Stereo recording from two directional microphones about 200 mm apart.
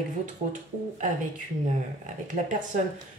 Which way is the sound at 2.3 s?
40° right (ahead or behind).